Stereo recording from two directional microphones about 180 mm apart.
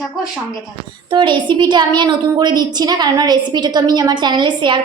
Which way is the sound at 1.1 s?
25° right (ahead or behind).